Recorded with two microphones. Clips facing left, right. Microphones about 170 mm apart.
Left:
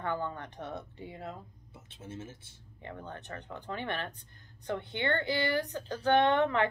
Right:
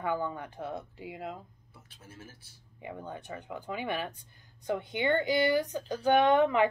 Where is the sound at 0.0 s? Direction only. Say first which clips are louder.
Right 2 dB; 10° right (ahead or behind).